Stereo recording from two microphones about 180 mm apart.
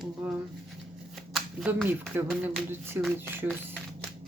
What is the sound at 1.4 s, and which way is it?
Shuffling cards, centre (ahead or behind).